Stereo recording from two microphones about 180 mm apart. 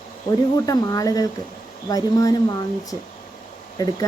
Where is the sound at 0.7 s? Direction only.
20° left (ahead or behind).